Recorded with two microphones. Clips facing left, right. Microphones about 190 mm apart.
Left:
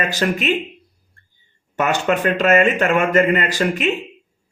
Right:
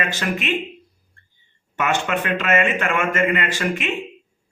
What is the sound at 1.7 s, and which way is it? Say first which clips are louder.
A man's voice: left 4 dB; 40° left (ahead or behind).